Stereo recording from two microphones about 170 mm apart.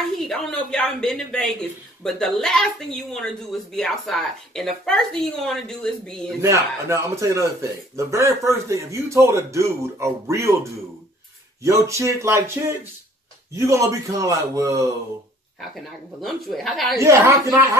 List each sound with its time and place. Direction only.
0.3 s speech: 5° left (ahead or behind)
6.4 s a man's voice: 15° right (ahead or behind)
15.7 s speech: centre (ahead or behind)
17.0 s speech: 15° right (ahead or behind)